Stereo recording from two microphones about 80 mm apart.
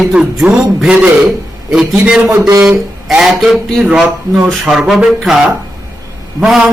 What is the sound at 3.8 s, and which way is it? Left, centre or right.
Speech, centre.